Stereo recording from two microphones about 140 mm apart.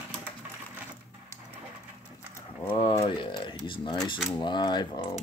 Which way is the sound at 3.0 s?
35° left (ahead or behind).